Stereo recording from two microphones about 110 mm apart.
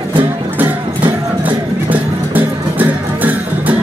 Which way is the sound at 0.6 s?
15° right (ahead or behind).